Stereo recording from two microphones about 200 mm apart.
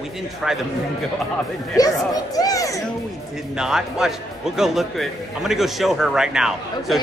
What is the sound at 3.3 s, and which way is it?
A man's voice, 5° right (ahead or behind).